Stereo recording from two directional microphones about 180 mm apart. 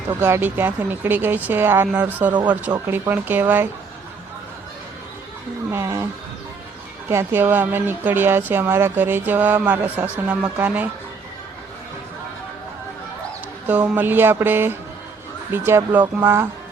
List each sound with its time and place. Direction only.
0.1 s speech: 15° right (ahead or behind)
5.7 s speech: 15° right (ahead or behind)
7.1 s speech: 15° right (ahead or behind)
13.7 s speech: 10° right (ahead or behind)